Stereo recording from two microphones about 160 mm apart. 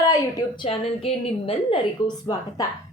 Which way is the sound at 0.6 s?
35° left (ahead or behind).